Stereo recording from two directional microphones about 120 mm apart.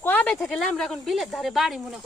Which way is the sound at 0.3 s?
Centre (ahead or behind).